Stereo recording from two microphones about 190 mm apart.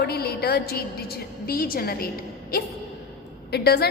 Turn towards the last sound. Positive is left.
turn(degrees=55)  # may be behind; listen again after turning